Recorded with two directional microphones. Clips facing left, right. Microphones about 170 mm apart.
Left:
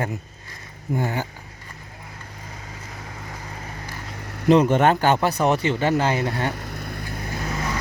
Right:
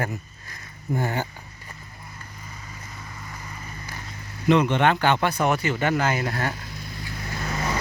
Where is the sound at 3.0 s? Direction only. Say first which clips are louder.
Left 3 dB; 75° left (ahead or behind).